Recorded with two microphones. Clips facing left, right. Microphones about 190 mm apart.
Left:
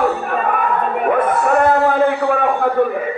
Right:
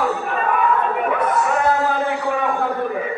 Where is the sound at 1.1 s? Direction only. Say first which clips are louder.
Left 6 dB; 55° left (ahead or behind).